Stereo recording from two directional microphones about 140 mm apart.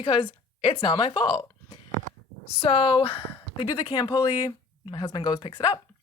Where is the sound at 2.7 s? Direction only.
35° left (ahead or behind).